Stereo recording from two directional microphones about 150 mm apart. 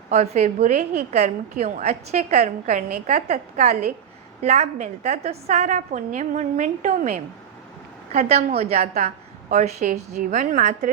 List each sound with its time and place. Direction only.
0.1 s a woman's voice: 50° right (ahead or behind)